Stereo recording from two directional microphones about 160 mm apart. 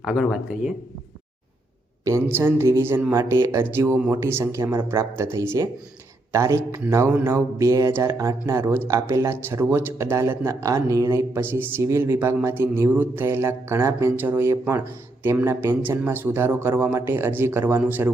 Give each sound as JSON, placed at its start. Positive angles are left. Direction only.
{"t": 0.0, "sound": "speech", "side_deg": 0}
{"t": 2.0, "sound": "speech", "side_deg": -15}